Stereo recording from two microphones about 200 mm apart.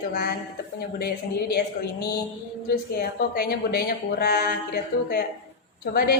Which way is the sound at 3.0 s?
50° left (ahead or behind).